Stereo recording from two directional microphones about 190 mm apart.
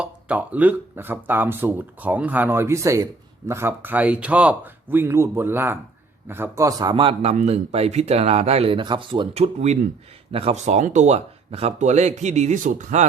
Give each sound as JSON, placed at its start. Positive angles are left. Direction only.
{"t": 0.0, "sound": "a man's voice", "side_deg": -5}